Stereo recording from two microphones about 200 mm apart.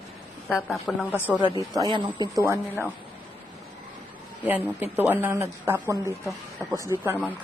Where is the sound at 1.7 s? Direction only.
20° right (ahead or behind).